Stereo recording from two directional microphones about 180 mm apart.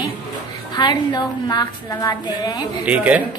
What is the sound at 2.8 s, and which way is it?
Speech, 10° right (ahead or behind).